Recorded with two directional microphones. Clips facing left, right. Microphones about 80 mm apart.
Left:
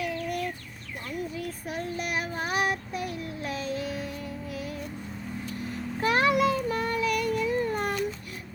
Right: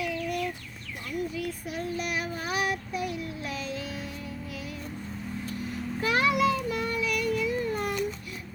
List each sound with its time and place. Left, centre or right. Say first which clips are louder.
0.0 s chicken: even; left
1.3 s child singing: right 1 dB; left
6.0 s child singing: left 2 dB; left